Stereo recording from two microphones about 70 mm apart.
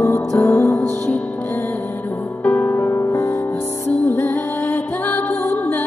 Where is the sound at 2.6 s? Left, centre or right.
Left.